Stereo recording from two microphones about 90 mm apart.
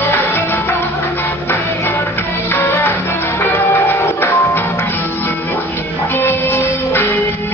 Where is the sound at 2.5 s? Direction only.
25° left (ahead or behind).